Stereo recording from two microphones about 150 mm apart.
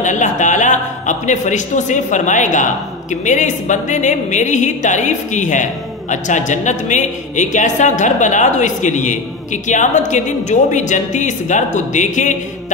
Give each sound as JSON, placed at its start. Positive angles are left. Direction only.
{"t": 0.0, "sound": "a man's voice", "side_deg": 55}